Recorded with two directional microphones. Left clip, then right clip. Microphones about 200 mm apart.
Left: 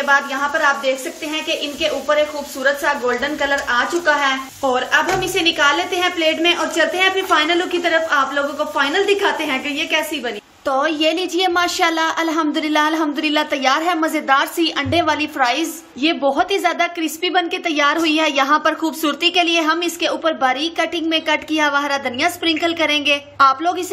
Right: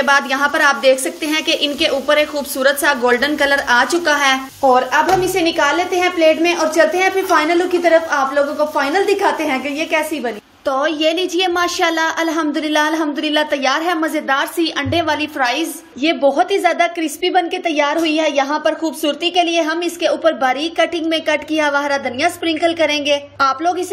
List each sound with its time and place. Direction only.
0.0 s a woman's voice: 40° right (ahead or behind)
4.7 s a woman's voice: 25° right (ahead or behind)
10.7 s a woman's voice: centre (ahead or behind)